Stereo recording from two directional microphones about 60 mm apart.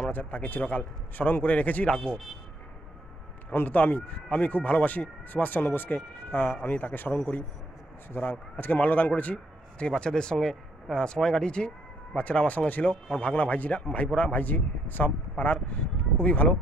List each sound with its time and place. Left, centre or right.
0.1 s a man's voice: left
2.0 s a man's voice: centre
3.4 s a man's voice: left